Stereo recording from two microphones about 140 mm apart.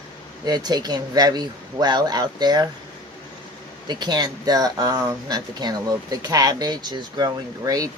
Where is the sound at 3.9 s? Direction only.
30° right (ahead or behind).